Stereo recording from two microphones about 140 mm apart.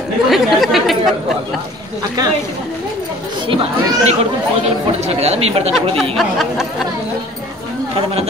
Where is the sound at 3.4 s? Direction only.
40° right (ahead or behind).